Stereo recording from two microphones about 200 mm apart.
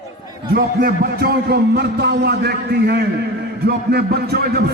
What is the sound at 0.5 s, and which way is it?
A man's voice, 50° right (ahead or behind).